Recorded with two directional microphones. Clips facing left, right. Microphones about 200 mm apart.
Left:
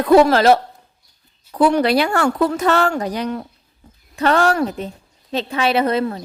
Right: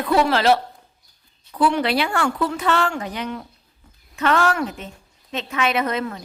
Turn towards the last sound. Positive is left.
turn(degrees=35)  # may be behind; listen again after turning